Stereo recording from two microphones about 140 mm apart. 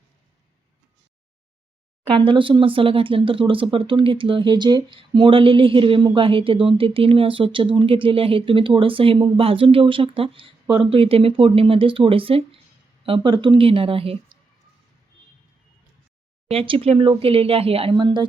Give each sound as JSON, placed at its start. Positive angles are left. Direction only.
{"t": 2.0, "sound": "speech", "side_deg": -35}
{"t": 16.5, "sound": "speech", "side_deg": -40}